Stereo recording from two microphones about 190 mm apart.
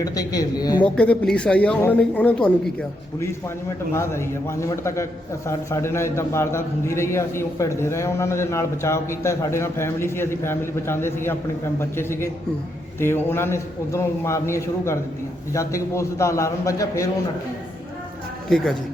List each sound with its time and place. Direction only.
0.0 s a woman's voice: 20° left (ahead or behind)
0.8 s speech: 5° left (ahead or behind)
3.9 s a man's voice: 15° left (ahead or behind)
18.5 s speech: centre (ahead or behind)